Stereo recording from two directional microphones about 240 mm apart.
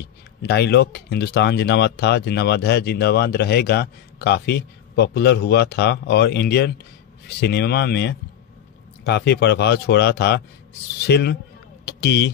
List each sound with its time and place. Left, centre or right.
0.0 s speech: left